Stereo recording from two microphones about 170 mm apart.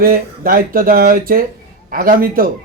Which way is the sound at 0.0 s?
55° right (ahead or behind).